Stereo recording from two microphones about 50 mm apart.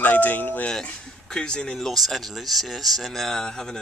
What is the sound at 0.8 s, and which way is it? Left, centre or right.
Speech, centre.